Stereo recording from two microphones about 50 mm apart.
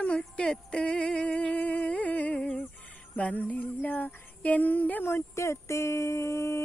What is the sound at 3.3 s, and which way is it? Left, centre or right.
Speech, left.